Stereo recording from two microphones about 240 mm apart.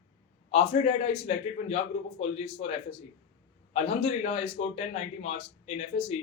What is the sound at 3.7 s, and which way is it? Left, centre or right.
Speech, left.